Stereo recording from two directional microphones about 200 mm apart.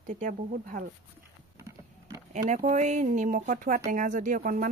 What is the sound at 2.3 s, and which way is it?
Speech, 40° right (ahead or behind).